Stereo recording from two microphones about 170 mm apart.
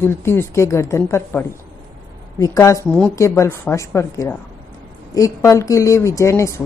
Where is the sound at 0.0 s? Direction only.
15° left (ahead or behind).